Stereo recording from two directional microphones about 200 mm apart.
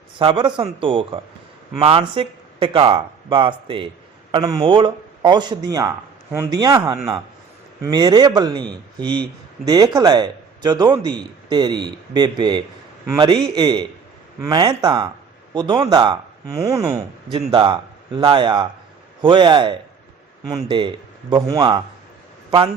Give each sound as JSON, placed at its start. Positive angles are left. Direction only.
{"t": 0.2, "sound": "speech", "side_deg": -25}
{"t": 9.6, "sound": "speech", "side_deg": -20}